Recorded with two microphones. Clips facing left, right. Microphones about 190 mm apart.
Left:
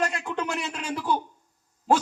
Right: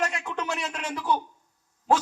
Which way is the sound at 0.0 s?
30° left (ahead or behind).